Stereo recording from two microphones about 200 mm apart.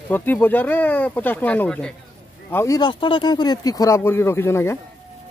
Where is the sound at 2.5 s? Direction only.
15° left (ahead or behind).